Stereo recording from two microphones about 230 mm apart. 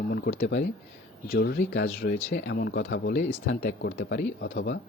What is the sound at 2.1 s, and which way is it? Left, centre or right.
Speech, left.